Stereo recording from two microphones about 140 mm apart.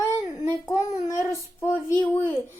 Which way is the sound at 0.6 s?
20° left (ahead or behind).